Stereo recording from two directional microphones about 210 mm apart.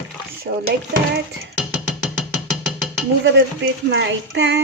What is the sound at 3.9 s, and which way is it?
Child singing, 60° right (ahead or behind).